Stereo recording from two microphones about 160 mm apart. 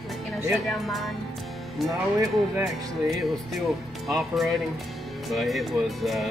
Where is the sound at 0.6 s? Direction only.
Centre (ahead or behind).